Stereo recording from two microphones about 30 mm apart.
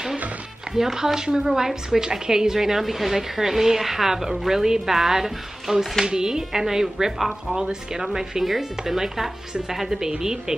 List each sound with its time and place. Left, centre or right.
0.9 s a woman's voice: centre
6.0 s a woman's voice: right
7.2 s speech: centre
7.5 s a woman's voice: right